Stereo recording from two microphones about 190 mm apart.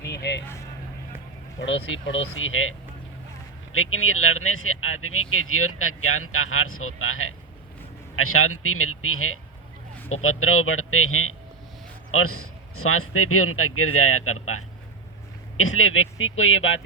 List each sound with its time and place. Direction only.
0.1 s vehicle: 60° left (ahead or behind)
1.6 s speech: 90° left
15.5 s speech: 90° left